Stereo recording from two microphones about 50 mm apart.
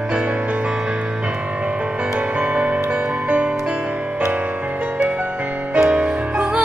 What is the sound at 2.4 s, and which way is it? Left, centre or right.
Music, right.